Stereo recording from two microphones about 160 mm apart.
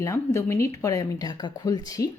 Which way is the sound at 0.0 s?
20° left (ahead or behind).